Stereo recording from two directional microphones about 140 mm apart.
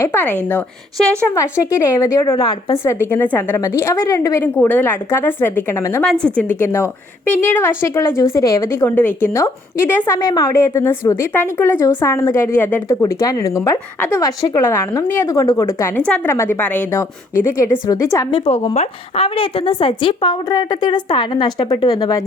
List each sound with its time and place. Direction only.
0.0 s a woman's voice: 15° left (ahead or behind)
1.4 s a woman's voice: 20° left (ahead or behind)
2.3 s a woman's voice: 30° left (ahead or behind)
2.7 s a woman's voice: 20° left (ahead or behind)
16.0 s a woman's voice: 10° left (ahead or behind)
18.3 s a woman's voice: 40° left (ahead or behind)